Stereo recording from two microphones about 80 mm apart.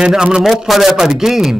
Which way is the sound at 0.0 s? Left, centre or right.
Centre.